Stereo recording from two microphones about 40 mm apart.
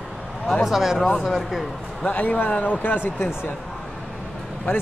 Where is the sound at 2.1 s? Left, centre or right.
Left.